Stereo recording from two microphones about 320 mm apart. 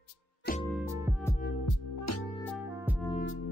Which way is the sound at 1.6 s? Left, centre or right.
Left.